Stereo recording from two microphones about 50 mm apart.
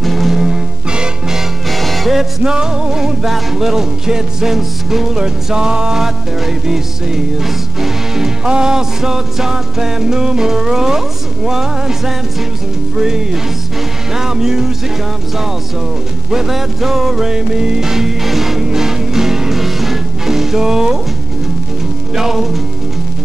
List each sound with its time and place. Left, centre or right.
0.0 s music: centre
0.4 s music: centre
1.7 s music: centre
2.4 s music: centre
16.3 s music: centre
22.1 s music: centre